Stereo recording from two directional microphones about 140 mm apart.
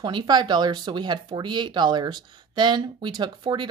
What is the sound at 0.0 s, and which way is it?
Speech, 30° right (ahead or behind).